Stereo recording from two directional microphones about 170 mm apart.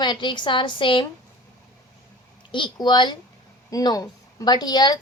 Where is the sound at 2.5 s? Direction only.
25° left (ahead or behind).